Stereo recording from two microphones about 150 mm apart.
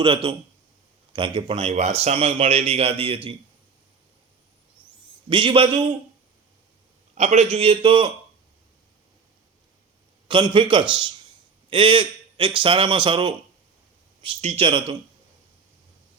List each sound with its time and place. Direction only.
0.0 s speech: 35° right (ahead or behind)
5.3 s speech: 35° right (ahead or behind)
7.2 s speech: 45° right (ahead or behind)
10.2 s speech: 35° right (ahead or behind)